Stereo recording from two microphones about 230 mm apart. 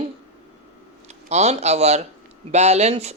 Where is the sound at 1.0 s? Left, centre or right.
Right.